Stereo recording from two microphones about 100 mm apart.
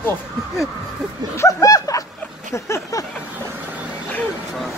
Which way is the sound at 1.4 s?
35° left (ahead or behind).